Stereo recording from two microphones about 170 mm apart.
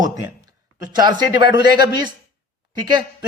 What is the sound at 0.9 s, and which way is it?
Speech, 25° right (ahead or behind).